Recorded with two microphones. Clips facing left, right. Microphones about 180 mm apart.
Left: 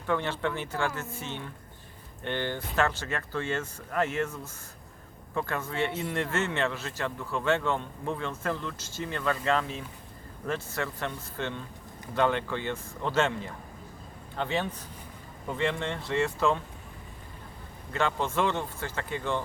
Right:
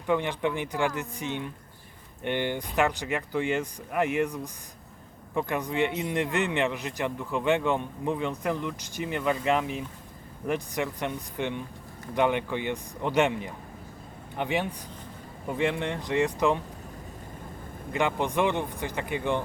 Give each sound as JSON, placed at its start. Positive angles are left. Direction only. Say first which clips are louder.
{"t": 0.0, "sound": "a man's voice", "louder": "right 3 dB", "side_deg": -15}
{"t": 17.9, "sound": "a man's voice", "louder": "right 2 dB", "side_deg": -15}